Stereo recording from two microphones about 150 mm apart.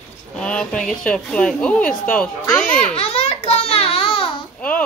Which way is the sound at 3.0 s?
40° left (ahead or behind).